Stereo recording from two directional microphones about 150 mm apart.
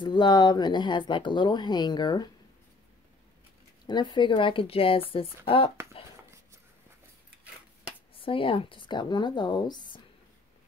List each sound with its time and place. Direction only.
0.0 s speech: 30° left (ahead or behind)
3.8 s a woman's voice: 30° left (ahead or behind)
8.2 s a woman's voice: 35° left (ahead or behind)